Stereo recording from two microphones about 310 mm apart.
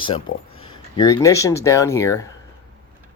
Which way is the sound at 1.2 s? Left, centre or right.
Centre.